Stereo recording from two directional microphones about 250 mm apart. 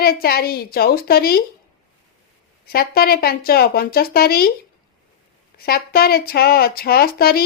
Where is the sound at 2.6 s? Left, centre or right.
Left.